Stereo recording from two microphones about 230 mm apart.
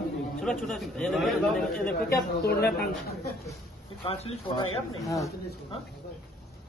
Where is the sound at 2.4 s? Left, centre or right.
Left.